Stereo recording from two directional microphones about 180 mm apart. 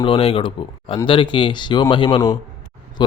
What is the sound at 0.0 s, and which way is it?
Speech, 30° left (ahead or behind).